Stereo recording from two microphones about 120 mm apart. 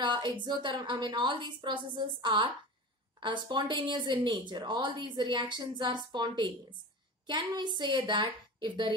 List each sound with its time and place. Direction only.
0.0 s speech: 40° right (ahead or behind)